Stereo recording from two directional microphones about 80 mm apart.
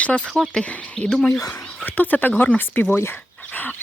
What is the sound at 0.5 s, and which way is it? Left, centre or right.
Speech, centre.